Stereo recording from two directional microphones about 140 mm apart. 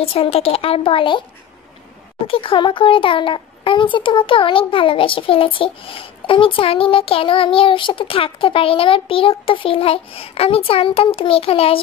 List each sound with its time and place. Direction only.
0.0 s speech: 45° left (ahead or behind)
2.2 s a child's voice: 40° left (ahead or behind)